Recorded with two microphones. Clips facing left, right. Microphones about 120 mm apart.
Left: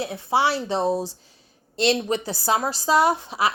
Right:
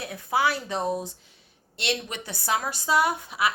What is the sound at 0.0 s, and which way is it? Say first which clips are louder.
A woman's voice: left 3 dB; 30° left (ahead or behind).